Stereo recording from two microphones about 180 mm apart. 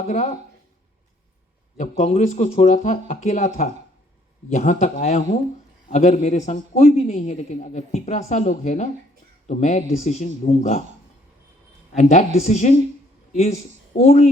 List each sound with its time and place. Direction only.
1.8 s a man's voice: 40° left (ahead or behind)
11.9 s a man's voice: 40° left (ahead or behind)